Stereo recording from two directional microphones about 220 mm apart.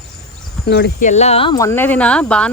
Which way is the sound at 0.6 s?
50° left (ahead or behind).